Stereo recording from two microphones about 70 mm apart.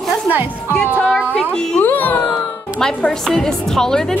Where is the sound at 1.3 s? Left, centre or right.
Centre.